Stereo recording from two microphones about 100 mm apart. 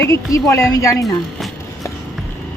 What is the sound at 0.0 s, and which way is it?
Speech, 30° left (ahead or behind).